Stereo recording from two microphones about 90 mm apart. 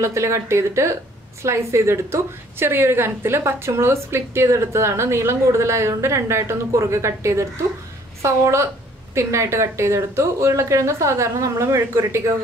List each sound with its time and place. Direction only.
0.0 s a woman's voice: 30° right (ahead or behind)